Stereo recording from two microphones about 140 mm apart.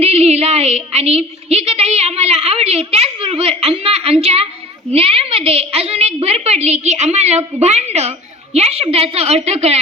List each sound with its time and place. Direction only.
0.0 s a woman's voice: 50° right (ahead or behind)